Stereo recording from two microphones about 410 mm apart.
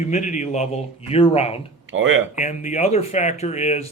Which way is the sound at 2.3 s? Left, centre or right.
Centre.